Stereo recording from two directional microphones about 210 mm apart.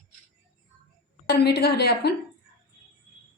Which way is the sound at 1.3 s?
50° left (ahead or behind).